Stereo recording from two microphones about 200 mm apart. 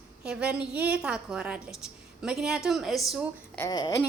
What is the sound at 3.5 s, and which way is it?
Speech, 20° left (ahead or behind).